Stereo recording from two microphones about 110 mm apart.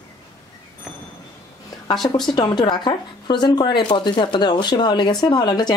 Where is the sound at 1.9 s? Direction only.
40° left (ahead or behind).